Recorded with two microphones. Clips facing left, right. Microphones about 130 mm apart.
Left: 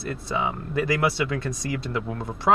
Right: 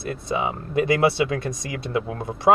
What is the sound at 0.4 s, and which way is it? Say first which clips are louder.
Speech: right 2 dB; 20° right (ahead or behind).